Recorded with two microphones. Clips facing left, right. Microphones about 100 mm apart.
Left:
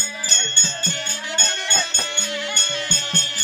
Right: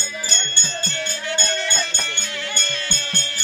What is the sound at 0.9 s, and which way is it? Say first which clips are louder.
Music: right 3 dB; 15° left (ahead or behind).